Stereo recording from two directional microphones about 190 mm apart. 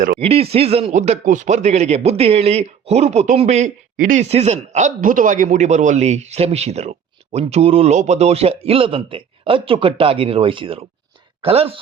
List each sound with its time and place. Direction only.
0.2 s speech: 30° right (ahead or behind)